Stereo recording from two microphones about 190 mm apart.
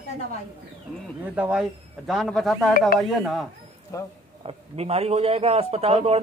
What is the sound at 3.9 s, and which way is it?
Speech, 15° left (ahead or behind).